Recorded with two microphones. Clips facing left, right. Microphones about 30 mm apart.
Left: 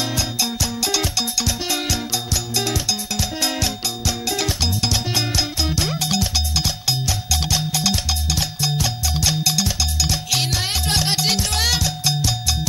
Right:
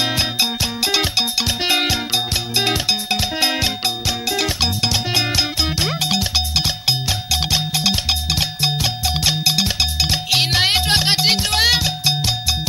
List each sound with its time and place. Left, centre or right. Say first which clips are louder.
0.0 s music: right 4 dB; right
11.0 s music: right 4 dB; right